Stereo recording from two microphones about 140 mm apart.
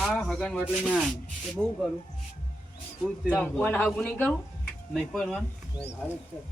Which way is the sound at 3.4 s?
15° left (ahead or behind).